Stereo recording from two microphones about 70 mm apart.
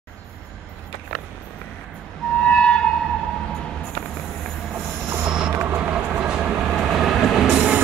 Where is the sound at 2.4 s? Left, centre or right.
Centre.